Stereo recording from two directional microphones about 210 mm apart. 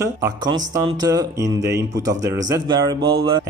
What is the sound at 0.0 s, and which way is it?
Speech, 15° right (ahead or behind).